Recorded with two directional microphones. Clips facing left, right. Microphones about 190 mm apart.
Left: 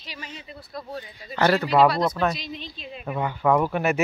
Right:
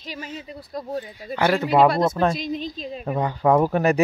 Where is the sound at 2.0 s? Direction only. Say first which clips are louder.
Right 3 dB; 25° right (ahead or behind).